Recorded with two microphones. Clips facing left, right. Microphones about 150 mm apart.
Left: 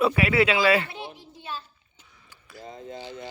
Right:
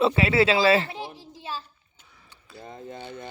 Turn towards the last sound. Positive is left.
turn(degrees=-60)  # may be behind; listen again after turning